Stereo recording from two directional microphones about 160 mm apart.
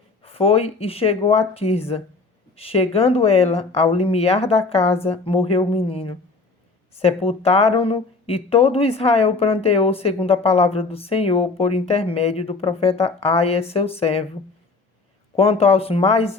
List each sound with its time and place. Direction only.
0.3 s speech: 35° left (ahead or behind)
15.4 s speech: 35° left (ahead or behind)